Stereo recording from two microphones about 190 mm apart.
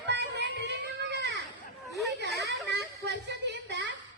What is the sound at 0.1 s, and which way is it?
Music, 70° right (ahead or behind).